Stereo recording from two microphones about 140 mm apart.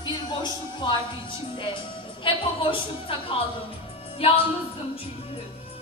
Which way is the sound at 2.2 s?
40° left (ahead or behind).